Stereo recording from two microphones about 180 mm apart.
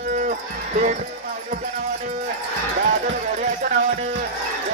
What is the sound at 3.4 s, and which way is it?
Music, 40° right (ahead or behind).